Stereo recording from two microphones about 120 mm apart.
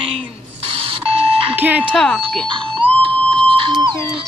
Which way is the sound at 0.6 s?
50° right (ahead or behind).